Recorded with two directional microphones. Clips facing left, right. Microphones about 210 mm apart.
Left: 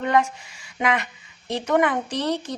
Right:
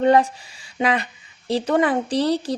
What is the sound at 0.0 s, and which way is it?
Speech, 35° right (ahead or behind).